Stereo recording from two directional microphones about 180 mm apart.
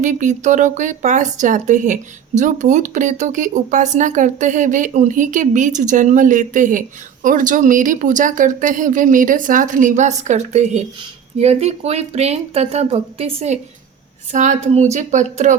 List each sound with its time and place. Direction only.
0.0 s speech: 45° right (ahead or behind)